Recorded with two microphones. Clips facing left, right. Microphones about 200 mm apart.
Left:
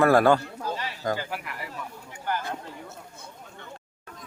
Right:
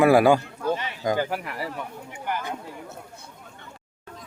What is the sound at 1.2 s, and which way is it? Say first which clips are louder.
Speech: right 7 dB; 40° right (ahead or behind).